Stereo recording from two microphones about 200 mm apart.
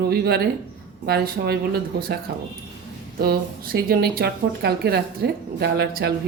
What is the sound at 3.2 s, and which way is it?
Speech, 50° right (ahead or behind).